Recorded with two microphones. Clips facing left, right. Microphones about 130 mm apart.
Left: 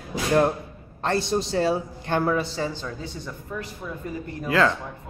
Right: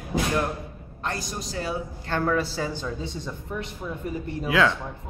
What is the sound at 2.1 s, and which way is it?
Speech, 10° left (ahead or behind).